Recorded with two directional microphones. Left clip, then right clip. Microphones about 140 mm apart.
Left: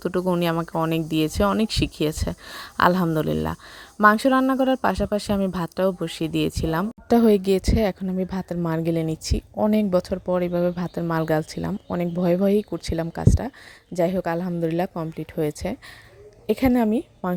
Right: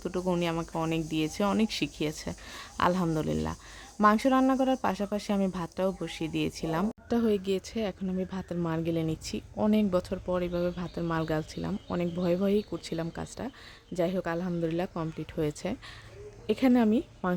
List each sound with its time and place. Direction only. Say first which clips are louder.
0.0 s speech: left 7 dB; 35° left (ahead or behind)
11.7 s a woman's voice: left 4 dB; 30° left (ahead or behind)